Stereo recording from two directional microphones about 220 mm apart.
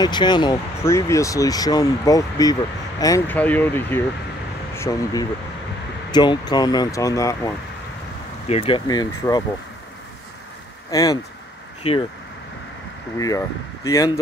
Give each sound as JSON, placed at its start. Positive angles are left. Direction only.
{"t": 0.0, "sound": "speech", "side_deg": 20}
{"t": 8.5, "sound": "speech", "side_deg": 25}
{"t": 10.9, "sound": "speech", "side_deg": 15}
{"t": 13.8, "sound": "speech", "side_deg": 15}